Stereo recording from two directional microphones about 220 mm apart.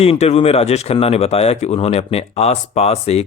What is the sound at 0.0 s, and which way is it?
A man's voice, 30° left (ahead or behind).